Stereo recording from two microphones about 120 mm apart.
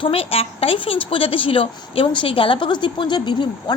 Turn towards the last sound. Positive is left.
turn(degrees=40)  # may be behind; listen again after turning